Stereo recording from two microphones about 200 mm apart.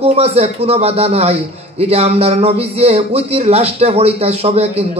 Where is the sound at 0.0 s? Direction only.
30° right (ahead or behind).